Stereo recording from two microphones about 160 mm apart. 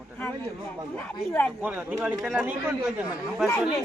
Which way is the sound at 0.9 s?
10° left (ahead or behind).